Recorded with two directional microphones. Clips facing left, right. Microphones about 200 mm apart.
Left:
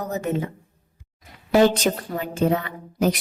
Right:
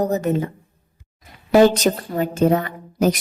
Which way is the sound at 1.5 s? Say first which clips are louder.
Right 4 dB; 40° right (ahead or behind).